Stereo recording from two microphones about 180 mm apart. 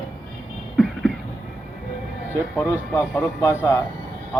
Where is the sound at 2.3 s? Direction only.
15° left (ahead or behind).